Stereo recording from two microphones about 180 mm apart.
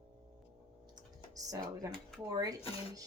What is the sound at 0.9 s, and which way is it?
Music, 20° right (ahead or behind).